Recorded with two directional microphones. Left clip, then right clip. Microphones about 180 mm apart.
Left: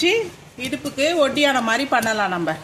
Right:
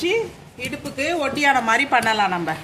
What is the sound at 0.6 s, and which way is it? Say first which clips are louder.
Speech: left 3 dB; 35° left (ahead or behind).